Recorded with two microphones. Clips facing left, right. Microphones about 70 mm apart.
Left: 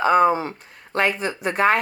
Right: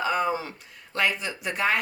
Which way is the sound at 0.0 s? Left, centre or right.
Left.